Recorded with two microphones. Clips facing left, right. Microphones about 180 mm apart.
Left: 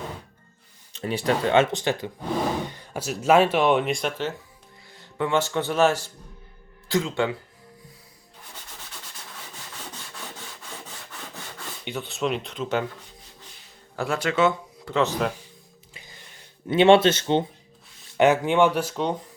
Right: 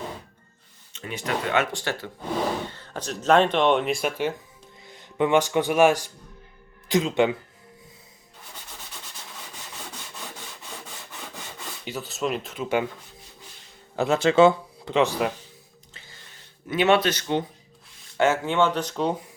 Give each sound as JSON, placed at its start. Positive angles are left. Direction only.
{"t": 0.9, "sound": "speech", "side_deg": 35}
{"t": 11.9, "sound": "speech", "side_deg": 0}
{"t": 13.9, "sound": "speech", "side_deg": -20}
{"t": 14.9, "sound": "speech", "side_deg": -10}
{"t": 15.9, "sound": "a sound", "side_deg": 15}
{"t": 16.6, "sound": "speech", "side_deg": 30}
{"t": 18.2, "sound": "speech", "side_deg": 15}